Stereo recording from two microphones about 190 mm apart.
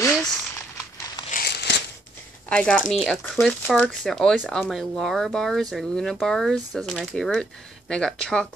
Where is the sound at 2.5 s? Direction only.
5° left (ahead or behind).